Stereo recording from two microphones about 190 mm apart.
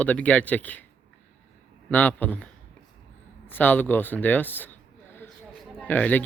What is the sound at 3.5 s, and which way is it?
Speech, 10° left (ahead or behind).